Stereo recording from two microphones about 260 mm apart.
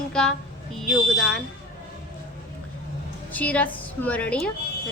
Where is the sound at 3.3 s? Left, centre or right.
Centre.